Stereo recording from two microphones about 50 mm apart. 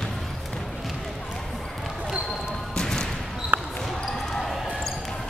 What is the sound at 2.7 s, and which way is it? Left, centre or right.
Basketball bounce, centre.